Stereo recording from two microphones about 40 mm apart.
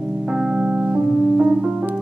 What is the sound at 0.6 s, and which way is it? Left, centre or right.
Music, right.